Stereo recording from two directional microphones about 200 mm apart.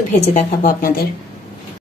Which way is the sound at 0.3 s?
40° left (ahead or behind).